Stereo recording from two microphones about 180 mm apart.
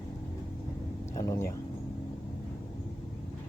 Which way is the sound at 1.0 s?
15° left (ahead or behind).